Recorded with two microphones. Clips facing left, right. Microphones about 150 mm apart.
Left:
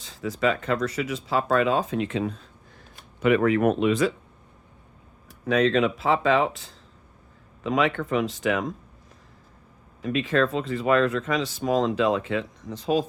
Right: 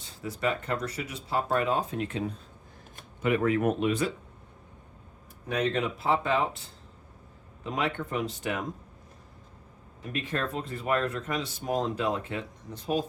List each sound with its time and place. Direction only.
0.0 s speech: 90° left
5.5 s speech: 90° left
10.0 s speech: 90° left